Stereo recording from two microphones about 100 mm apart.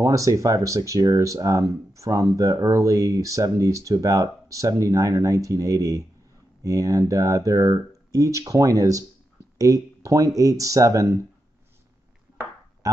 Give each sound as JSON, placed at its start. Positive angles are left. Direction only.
{"t": 0.0, "sound": "speech", "side_deg": -35}
{"t": 12.8, "sound": "speech", "side_deg": -35}